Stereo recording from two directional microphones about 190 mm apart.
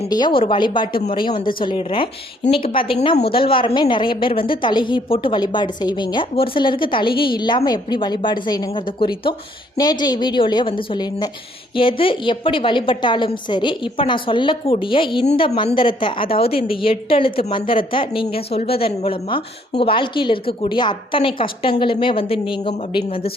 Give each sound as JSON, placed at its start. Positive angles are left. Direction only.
{"t": 0.1, "sound": "a woman's voice", "side_deg": 25}